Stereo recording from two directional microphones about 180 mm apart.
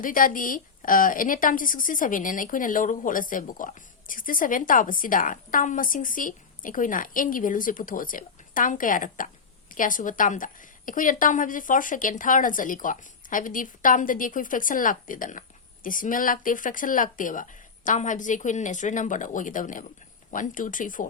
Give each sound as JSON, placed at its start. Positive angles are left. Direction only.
{"t": 0.0, "sound": "a woman's voice", "side_deg": 50}